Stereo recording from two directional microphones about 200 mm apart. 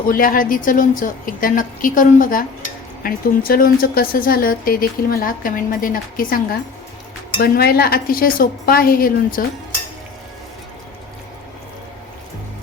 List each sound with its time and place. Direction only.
0.1 s a woman's voice: 45° left (ahead or behind)